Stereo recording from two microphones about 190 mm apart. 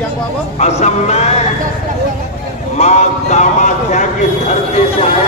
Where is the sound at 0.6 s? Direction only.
35° left (ahead or behind).